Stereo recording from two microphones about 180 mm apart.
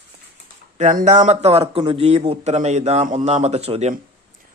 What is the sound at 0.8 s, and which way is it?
Speech, 40° right (ahead or behind).